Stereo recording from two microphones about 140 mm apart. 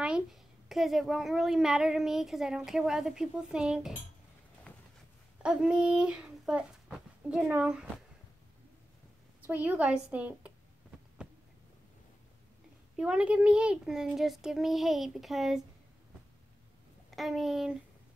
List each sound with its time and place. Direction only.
0.0 s a woman's voice: 5° right (ahead or behind)
4.7 s a sound: 10° left (ahead or behind)
5.4 s speech: 5° right (ahead or behind)
9.5 s speech: 10° right (ahead or behind)
12.9 s a woman's voice: 5° right (ahead or behind)
17.1 s a woman's voice: centre (ahead or behind)